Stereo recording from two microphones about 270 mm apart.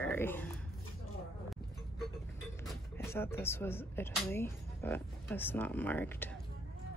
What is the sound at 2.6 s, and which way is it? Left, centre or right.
Speech, centre.